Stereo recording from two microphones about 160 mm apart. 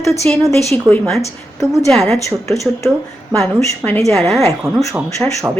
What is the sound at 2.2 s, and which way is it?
Speech, 20° left (ahead or behind).